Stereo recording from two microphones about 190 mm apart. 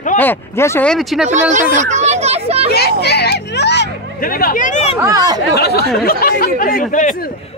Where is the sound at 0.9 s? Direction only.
Centre (ahead or behind).